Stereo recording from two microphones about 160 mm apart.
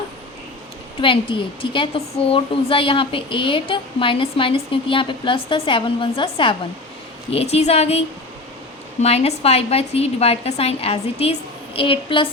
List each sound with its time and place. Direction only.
1.0 s a woman's voice: 35° left (ahead or behind)